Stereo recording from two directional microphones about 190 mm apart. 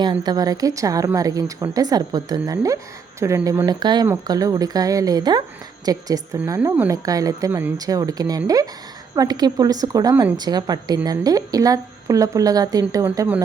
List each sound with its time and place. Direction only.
0.0 s a woman's voice: 20° right (ahead or behind)